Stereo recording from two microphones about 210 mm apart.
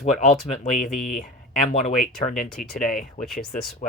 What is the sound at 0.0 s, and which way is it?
Speech, 30° left (ahead or behind).